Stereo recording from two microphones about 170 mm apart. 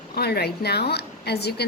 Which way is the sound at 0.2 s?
70° left (ahead or behind).